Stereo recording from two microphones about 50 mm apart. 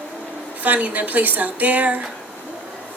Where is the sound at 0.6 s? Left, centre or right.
Right.